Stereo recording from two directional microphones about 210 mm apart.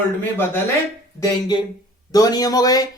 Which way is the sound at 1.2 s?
20° left (ahead or behind).